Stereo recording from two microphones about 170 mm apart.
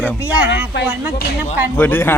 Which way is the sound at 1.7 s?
10° left (ahead or behind).